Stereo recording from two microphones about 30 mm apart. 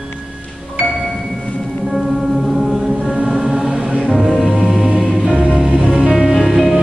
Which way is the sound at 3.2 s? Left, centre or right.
Centre.